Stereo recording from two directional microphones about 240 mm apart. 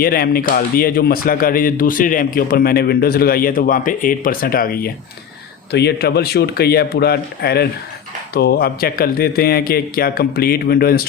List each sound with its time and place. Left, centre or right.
0.0 s speech: left